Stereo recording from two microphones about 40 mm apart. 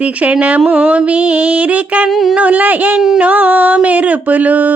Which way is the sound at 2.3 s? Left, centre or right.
Right.